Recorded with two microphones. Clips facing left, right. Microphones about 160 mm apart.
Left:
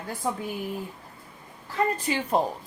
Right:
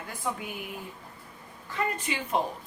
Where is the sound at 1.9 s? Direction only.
35° left (ahead or behind).